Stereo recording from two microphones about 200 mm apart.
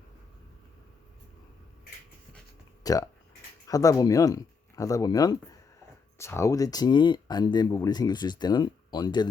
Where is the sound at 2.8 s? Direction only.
20° left (ahead or behind).